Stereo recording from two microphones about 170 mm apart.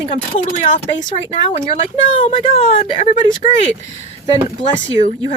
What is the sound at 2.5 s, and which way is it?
Speech, 45° left (ahead or behind).